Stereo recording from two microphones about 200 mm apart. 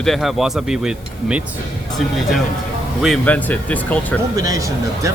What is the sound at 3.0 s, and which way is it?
Speech, 5° left (ahead or behind).